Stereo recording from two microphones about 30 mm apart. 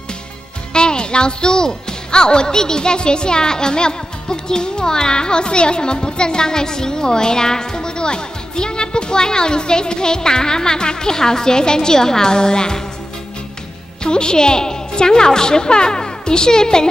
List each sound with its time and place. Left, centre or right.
0.7 s a woman's voice: left
14.0 s a woman's voice: left